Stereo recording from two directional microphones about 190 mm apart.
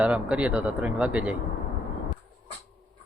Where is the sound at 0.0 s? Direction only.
5° right (ahead or behind).